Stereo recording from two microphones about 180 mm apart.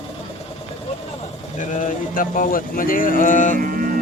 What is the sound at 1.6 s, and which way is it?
Speech, 45° left (ahead or behind).